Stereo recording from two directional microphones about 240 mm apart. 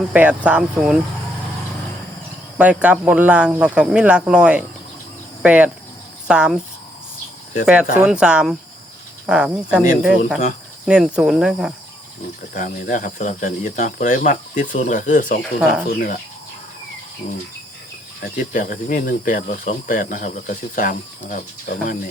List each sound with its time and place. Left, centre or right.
0.1 s speech: centre
2.6 s speech: centre
7.6 s speech: centre
12.5 s speech: left
18.5 s speech: left